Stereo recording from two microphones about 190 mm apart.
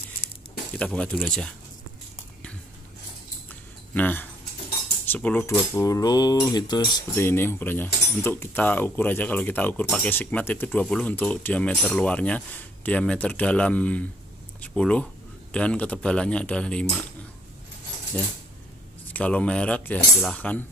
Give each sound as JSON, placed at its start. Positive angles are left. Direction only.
{"t": 0.7, "sound": "speech", "side_deg": 5}
{"t": 3.4, "sound": "a sound", "side_deg": 10}
{"t": 5.0, "sound": "cutlery", "side_deg": 10}
{"t": 14.6, "sound": "speech", "side_deg": 5}
{"t": 18.1, "sound": "cutlery", "side_deg": 5}